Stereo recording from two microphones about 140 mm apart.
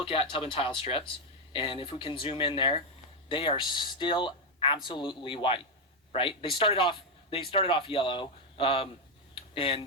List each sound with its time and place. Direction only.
0.0 s a man's voice: 40° left (ahead or behind)